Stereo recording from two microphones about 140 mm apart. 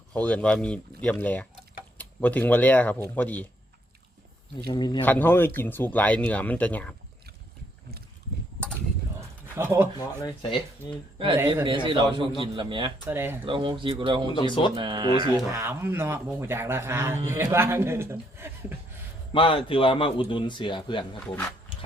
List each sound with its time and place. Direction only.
0.1 s speech: 10° left (ahead or behind)
4.7 s a man's voice: 30° left (ahead or behind)
5.0 s speech: 10° left (ahead or behind)
9.6 s speech: 15° right (ahead or behind)
10.2 s a man's voice: 30° left (ahead or behind)
11.3 s speech: 20° right (ahead or behind)
11.6 s a man's voice: 35° right (ahead or behind)
13.1 s speech: 15° right (ahead or behind)
13.4 s a man's voice: 40° right (ahead or behind)
14.3 s a man's voice: 35° left (ahead or behind)
14.8 s a man's voice: 35° right (ahead or behind)
15.5 s speech: 20° right (ahead or behind)
19.3 s a man's voice: 40° left (ahead or behind)